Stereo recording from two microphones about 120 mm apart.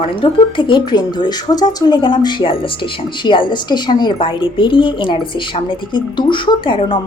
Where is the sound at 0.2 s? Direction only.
45° left (ahead or behind).